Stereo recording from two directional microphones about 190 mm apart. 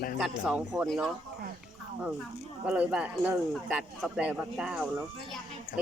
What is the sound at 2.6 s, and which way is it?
Speech, 5° right (ahead or behind).